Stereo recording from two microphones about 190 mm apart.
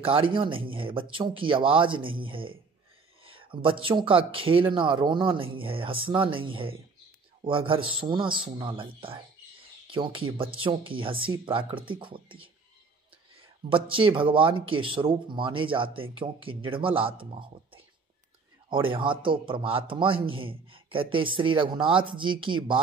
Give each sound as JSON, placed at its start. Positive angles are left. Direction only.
{"t": 0.0, "sound": "a man's voice", "side_deg": -25}
{"t": 13.7, "sound": "a man's voice", "side_deg": -25}